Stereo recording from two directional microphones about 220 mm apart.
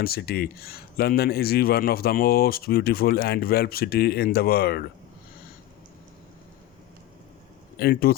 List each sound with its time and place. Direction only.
0.0 s speech: 45° left (ahead or behind)
7.8 s speech: 45° left (ahead or behind)